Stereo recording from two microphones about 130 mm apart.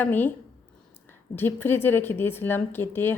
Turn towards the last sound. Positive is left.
turn(degrees=15)  # may be behind; listen again after turning